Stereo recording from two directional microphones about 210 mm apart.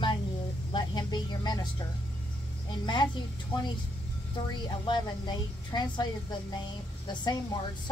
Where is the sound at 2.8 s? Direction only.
20° left (ahead or behind).